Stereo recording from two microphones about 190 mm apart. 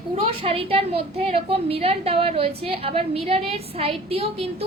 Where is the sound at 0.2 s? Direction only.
30° right (ahead or behind).